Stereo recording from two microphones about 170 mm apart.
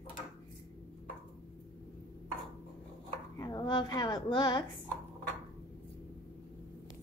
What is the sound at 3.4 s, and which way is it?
A child's voice, 25° left (ahead or behind).